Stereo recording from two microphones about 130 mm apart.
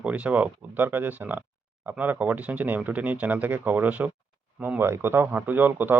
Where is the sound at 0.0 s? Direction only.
10° right (ahead or behind).